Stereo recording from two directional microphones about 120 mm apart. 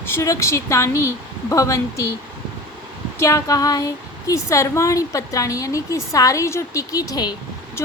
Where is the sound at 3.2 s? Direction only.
25° left (ahead or behind).